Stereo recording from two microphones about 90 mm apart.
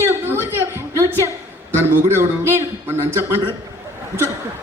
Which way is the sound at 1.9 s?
25° right (ahead or behind).